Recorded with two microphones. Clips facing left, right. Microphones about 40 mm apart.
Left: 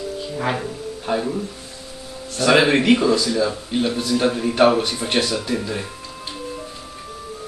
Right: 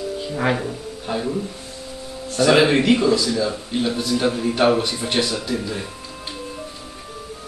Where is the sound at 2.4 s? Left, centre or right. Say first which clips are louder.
Even; centre.